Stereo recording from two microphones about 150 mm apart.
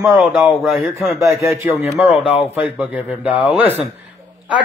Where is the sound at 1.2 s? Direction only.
20° right (ahead or behind).